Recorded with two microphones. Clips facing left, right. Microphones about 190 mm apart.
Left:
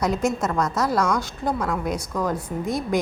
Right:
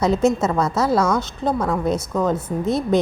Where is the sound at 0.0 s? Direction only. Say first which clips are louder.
Right 5 dB; 25° right (ahead or behind).